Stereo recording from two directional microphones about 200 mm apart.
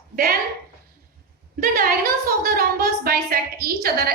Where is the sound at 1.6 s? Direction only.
45° right (ahead or behind).